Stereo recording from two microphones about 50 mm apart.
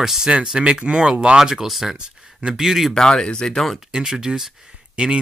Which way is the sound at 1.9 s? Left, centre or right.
Centre.